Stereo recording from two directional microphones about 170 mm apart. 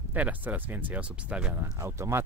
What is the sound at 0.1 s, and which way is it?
Speech, 10° right (ahead or behind).